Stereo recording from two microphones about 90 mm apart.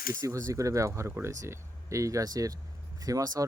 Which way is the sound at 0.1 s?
35° right (ahead or behind).